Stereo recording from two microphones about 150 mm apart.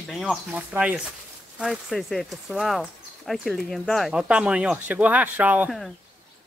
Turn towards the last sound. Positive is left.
turn(degrees=-10)  # may be behind; listen again after turning